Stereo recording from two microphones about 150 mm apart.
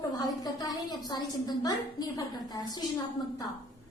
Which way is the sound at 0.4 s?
25° left (ahead or behind).